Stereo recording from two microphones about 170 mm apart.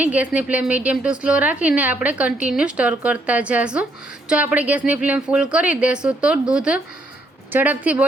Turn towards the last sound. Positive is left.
turn(degrees=-10)  # may be behind; listen again after turning